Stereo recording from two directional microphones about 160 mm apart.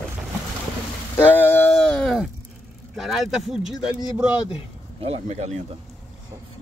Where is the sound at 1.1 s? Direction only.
10° left (ahead or behind).